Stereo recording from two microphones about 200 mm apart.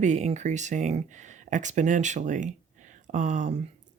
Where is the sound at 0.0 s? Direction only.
35° right (ahead or behind).